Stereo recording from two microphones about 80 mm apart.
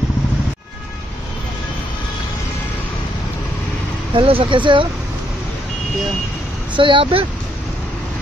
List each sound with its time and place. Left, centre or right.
4.1 s speech: right
6.7 s speech: right